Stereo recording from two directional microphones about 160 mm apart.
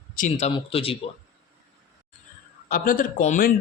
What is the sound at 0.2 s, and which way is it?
Speech, 50° left (ahead or behind).